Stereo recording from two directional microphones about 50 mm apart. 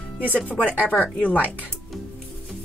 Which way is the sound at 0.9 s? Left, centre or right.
Left.